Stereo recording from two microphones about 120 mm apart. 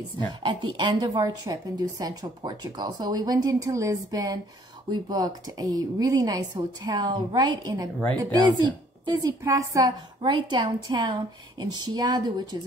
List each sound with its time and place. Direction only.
0.4 s a woman's voice: 40° right (ahead or behind)